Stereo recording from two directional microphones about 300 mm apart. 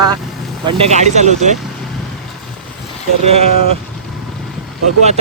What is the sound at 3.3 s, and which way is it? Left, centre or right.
Duck, centre.